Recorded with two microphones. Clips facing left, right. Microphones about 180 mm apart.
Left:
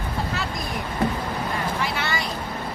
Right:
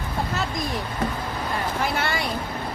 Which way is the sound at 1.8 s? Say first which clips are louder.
Right 2 dB; 50° right (ahead or behind).